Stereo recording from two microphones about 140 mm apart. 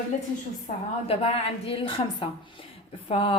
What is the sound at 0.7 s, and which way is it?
A woman's voice, 50° left (ahead or behind).